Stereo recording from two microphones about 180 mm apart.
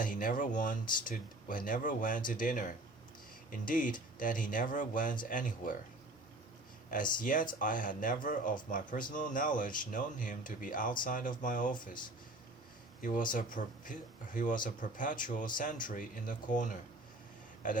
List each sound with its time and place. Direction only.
0.0 s speech: 50° left (ahead or behind)
6.9 s speech: 50° left (ahead or behind)
13.0 s speech: 45° left (ahead or behind)